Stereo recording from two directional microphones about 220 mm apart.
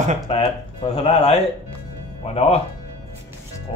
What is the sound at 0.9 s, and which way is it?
Speech, 25° left (ahead or behind).